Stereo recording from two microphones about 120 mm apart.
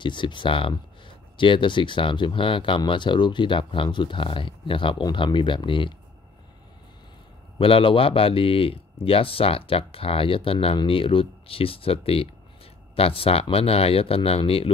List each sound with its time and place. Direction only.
0.0 s speech: 40° left (ahead or behind)
7.5 s speech: 50° left (ahead or behind)